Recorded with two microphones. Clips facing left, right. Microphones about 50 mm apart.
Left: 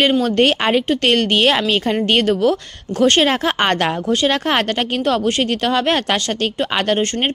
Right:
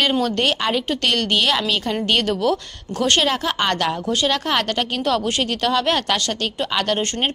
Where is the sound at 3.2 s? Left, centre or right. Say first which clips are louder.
Left 4 dB; left.